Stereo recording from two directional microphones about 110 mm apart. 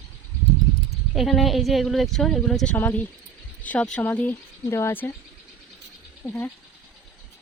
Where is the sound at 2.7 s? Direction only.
15° left (ahead or behind).